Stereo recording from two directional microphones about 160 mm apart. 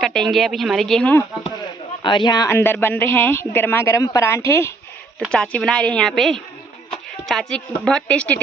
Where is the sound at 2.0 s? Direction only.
30° left (ahead or behind).